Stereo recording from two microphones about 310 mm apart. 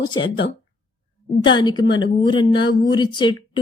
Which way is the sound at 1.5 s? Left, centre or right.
Centre.